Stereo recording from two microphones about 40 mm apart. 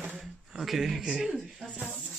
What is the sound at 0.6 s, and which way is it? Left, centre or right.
Speech, centre.